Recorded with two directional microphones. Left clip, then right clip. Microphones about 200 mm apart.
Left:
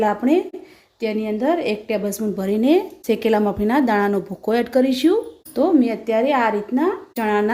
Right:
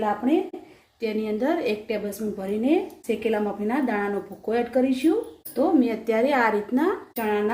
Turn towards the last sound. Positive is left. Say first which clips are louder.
# left 5 dB
turn(degrees=50)  # may be behind; listen again after turning